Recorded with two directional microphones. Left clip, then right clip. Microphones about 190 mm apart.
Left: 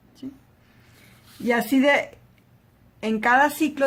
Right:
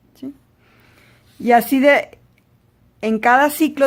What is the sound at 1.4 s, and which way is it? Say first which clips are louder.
Speech: right 7 dB; 45° right (ahead or behind).